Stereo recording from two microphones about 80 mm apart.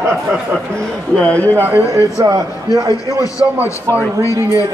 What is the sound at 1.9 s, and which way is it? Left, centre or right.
Speech, right.